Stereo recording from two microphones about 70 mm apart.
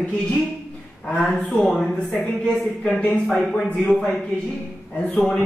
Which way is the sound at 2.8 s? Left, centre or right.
Centre.